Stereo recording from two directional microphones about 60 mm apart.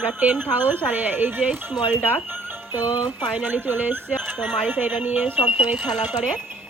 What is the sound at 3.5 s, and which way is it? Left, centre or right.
Speech, right.